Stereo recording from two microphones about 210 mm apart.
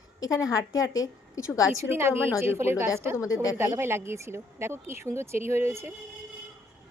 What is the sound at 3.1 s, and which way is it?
Speech, 15° left (ahead or behind).